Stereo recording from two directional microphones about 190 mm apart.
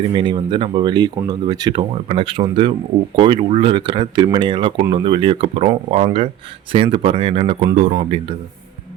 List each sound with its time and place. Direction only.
0.1 s speech: 25° right (ahead or behind)